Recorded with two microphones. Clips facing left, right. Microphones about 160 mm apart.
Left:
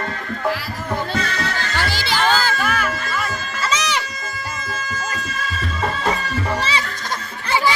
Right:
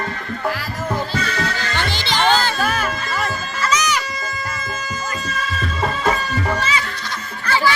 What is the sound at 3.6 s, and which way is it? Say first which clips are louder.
Music: right 2 dB; 30° left (ahead or behind).